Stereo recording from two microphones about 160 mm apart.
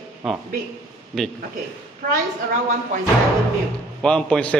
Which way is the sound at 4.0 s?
5° left (ahead or behind).